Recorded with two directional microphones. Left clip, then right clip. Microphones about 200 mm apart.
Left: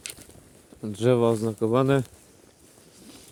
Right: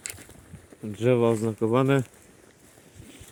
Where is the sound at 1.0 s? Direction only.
10° left (ahead or behind).